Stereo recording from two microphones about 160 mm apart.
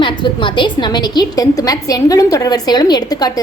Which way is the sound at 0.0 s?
30° left (ahead or behind).